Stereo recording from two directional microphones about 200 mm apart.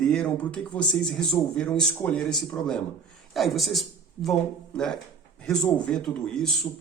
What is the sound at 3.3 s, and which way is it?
Speech, centre (ahead or behind).